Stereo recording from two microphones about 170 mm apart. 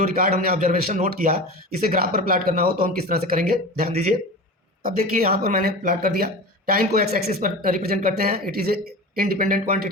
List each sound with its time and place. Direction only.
0.0 s speech: 55° right (ahead or behind)